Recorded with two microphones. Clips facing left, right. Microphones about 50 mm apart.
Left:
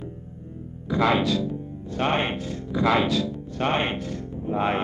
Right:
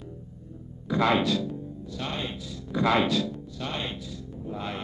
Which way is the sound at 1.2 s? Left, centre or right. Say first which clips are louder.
Left 3 dB; left.